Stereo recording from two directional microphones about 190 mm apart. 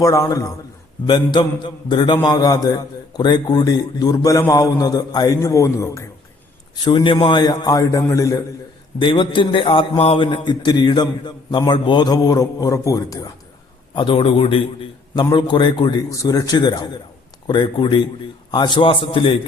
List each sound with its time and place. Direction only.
0.0 s a man's voice: 15° left (ahead or behind)